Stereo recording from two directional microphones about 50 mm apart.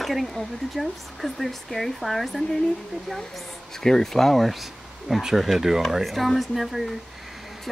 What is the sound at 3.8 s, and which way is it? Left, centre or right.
Speech, centre.